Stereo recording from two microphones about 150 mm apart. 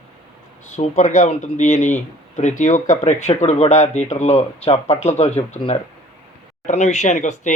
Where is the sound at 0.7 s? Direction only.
55° left (ahead or behind).